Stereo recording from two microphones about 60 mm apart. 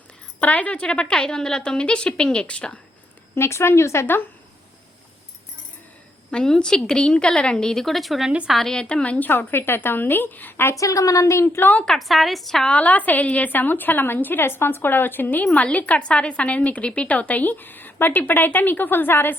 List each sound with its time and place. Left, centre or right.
0.3 s a woman's voice: left
3.3 s speech: left
6.3 s a woman's voice: centre
8.7 s a woman's voice: centre; by 10.8 s left
10.8 s a woman's voice: left
11.4 s a woman's voice: left
11.9 s a woman's voice: centre
12.7 s a woman's voice: left